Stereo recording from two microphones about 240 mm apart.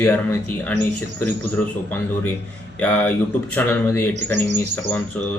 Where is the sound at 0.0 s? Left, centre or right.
Centre.